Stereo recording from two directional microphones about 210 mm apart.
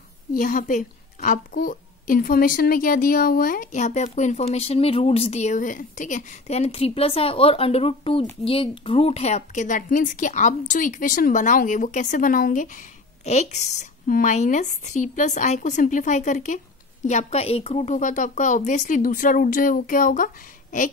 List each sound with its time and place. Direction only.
0.3 s a woman's voice: 40° left (ahead or behind)